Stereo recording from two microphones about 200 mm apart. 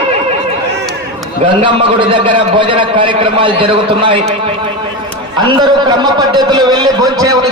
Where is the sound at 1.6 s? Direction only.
25° right (ahead or behind).